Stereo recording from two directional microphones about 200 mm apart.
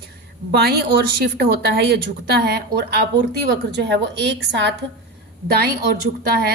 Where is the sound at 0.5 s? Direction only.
55° right (ahead or behind).